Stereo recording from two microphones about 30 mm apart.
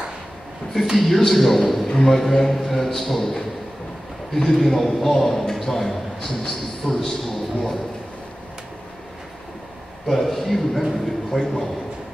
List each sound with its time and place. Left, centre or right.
0.9 s a man's voice: centre
10.0 s a man's voice: centre